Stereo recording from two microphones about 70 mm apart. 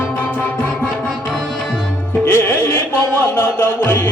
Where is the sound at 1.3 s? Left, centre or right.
Centre.